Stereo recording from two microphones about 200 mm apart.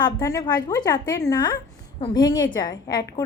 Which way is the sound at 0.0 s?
20° left (ahead or behind).